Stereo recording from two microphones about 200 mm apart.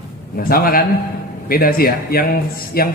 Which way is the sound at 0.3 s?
45° left (ahead or behind).